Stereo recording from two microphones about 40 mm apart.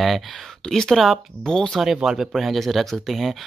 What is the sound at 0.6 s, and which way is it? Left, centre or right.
Speech, centre.